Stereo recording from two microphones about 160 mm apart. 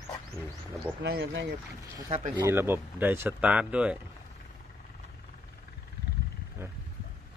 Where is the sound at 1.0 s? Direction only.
90° right.